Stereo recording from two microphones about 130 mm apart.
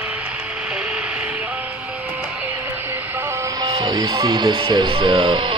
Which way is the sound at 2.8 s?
15° right (ahead or behind).